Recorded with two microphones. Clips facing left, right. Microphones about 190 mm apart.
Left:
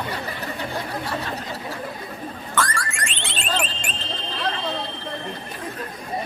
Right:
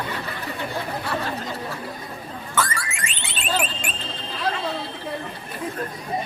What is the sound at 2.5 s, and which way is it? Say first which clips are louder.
Car alarm: even; 5° right (ahead or behind).